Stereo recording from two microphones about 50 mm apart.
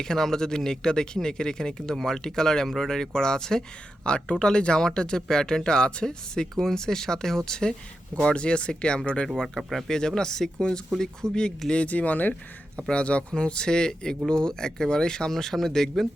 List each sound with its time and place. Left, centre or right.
0.0 s speech: centre
9.6 s speech: centre
9.9 s speech: centre
11.7 s speech: left
12.9 s speech: left; by 16.0 s centre